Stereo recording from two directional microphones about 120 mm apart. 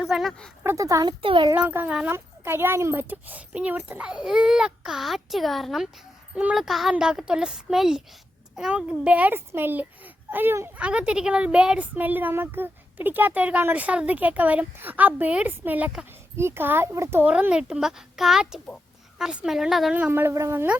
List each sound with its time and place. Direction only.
0.0 s speech: centre (ahead or behind)
0.6 s speech: 25° right (ahead or behind)
1.2 s a child's voice: 45° right (ahead or behind)
1.5 s a child's voice: 15° right (ahead or behind)
20.0 s a child's voice: 15° right (ahead or behind)